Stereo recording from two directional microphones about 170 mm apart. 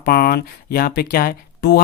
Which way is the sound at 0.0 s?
65° left (ahead or behind).